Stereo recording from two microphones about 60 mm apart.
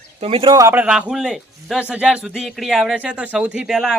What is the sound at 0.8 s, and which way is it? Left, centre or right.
Speech, centre.